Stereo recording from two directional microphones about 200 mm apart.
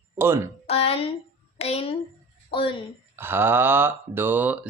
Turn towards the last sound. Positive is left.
turn(degrees=-10)  # may be behind; listen again after turning